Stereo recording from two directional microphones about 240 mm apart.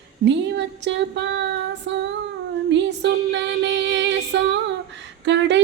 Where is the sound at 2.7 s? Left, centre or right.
Right.